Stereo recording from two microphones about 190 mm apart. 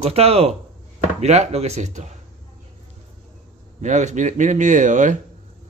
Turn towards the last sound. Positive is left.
turn(degrees=-40)  # may be behind; listen again after turning